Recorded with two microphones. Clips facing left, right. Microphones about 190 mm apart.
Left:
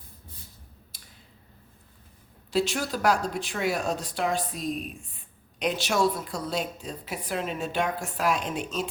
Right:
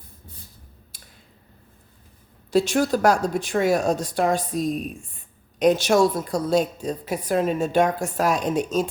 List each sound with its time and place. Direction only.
2.5 s a woman's voice: 45° right (ahead or behind)